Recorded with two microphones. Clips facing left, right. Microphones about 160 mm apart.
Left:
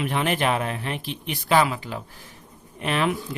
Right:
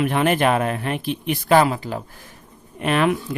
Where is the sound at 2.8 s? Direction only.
55° right (ahead or behind).